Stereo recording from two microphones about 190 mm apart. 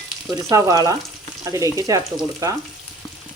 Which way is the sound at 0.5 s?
15° right (ahead or behind).